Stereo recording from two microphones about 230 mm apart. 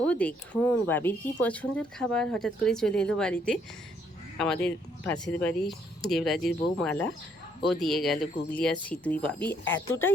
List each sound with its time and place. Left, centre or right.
0.0 s speech: centre
9.4 s speech: left
9.7 s speech: centre